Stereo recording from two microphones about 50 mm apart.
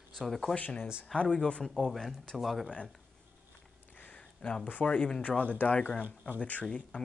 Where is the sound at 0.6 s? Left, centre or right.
Left.